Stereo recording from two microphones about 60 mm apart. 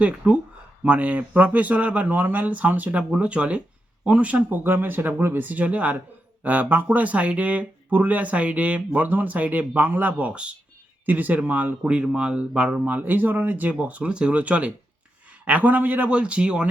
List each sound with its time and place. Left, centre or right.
0.2 s speech: centre
11.8 s speech: centre